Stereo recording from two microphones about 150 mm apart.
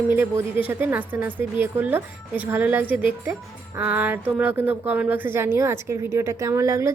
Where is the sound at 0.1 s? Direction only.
15° right (ahead or behind).